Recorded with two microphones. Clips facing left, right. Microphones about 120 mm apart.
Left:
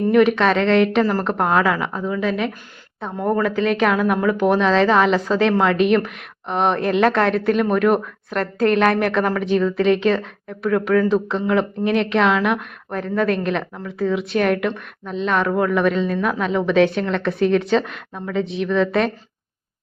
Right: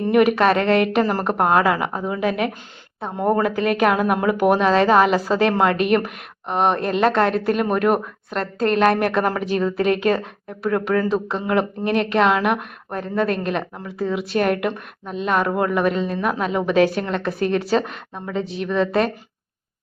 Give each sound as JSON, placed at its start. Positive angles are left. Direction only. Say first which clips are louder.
{"t": 0.1, "sound": "a woman's voice", "louder": "even", "side_deg": -10}
{"t": 2.2, "sound": "speech", "louder": "right 1 dB", "side_deg": -55}
{"t": 3.2, "sound": "a woman's voice", "louder": "even", "side_deg": -15}